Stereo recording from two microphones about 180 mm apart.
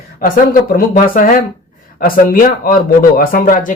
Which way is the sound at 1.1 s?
50° left (ahead or behind).